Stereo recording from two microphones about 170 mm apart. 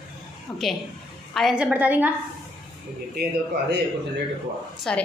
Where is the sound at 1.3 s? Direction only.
Centre (ahead or behind).